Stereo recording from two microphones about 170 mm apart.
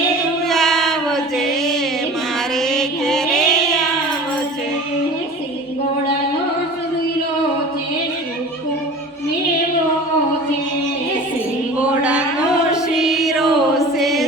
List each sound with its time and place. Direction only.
0.4 s music: centre (ahead or behind)
11.8 s mantra: 5° right (ahead or behind)
12.7 s music: centre (ahead or behind)